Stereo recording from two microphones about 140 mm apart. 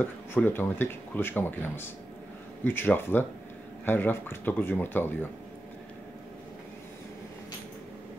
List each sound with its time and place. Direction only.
0.0 s speech: 15° left (ahead or behind)